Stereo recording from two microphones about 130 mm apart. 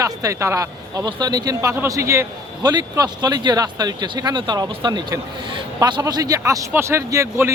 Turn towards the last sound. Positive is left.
turn(degrees=-20)  # may be behind; listen again after turning